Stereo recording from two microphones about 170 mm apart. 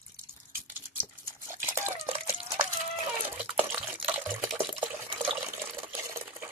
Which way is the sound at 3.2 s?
10° right (ahead or behind).